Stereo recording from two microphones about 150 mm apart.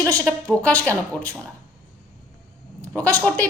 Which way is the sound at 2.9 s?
10° left (ahead or behind).